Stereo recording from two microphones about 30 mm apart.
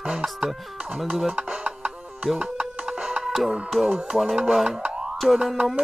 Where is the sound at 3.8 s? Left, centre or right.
Centre.